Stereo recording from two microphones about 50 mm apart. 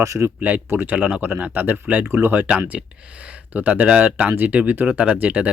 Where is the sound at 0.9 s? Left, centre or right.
Right.